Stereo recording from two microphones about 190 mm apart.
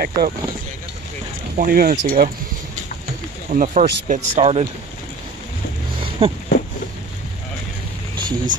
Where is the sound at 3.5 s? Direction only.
40° right (ahead or behind).